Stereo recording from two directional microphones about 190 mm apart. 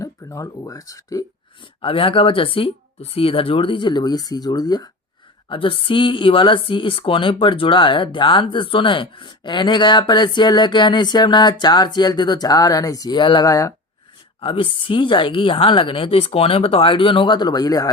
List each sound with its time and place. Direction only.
0.0 s speech: 15° left (ahead or behind)
1.8 s speech: 30° left (ahead or behind)